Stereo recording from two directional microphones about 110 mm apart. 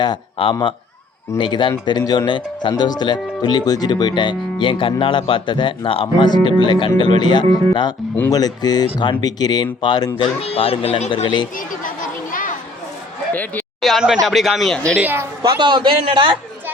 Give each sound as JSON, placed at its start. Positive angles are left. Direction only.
{"t": 0.0, "sound": "speech", "side_deg": 50}
{"t": 10.2, "sound": "speech", "side_deg": 60}
{"t": 13.3, "sound": "a sound", "side_deg": 15}
{"t": 13.8, "sound": "a man's voice", "side_deg": 0}
{"t": 14.9, "sound": "a woman's voice", "side_deg": -20}
{"t": 15.4, "sound": "a man's voice", "side_deg": -45}